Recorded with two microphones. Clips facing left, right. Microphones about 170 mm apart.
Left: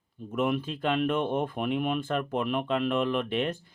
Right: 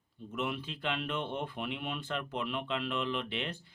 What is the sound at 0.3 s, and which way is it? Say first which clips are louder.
Speech: left 9 dB; 50° left (ahead or behind).